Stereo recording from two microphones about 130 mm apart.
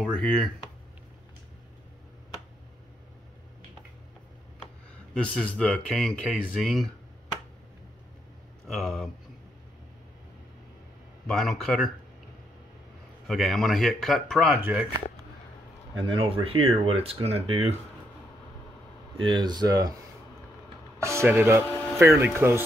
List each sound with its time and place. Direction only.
0.0 s a sound: 5° left (ahead or behind)
5.3 s speech: 10° left (ahead or behind)
8.6 s speech: 5° left (ahead or behind)
11.2 s speech: centre (ahead or behind)
13.3 s speech: centre (ahead or behind)
14.6 s speech: 10° right (ahead or behind)
16.0 s speech: 40° right (ahead or behind)
19.1 s speech: 35° right (ahead or behind)
21.0 s speech: 20° right (ahead or behind)